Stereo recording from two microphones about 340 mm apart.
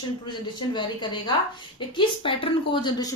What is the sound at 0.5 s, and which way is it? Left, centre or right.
Speech, centre.